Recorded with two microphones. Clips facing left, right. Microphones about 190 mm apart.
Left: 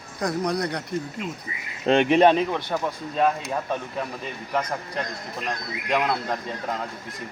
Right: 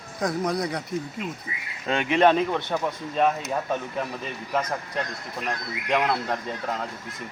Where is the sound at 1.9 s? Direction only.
55° left (ahead or behind).